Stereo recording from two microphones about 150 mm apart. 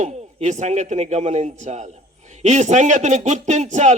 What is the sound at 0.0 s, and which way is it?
A man's voice, 50° right (ahead or behind).